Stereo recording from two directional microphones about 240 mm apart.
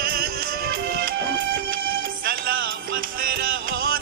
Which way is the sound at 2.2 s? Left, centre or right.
Right.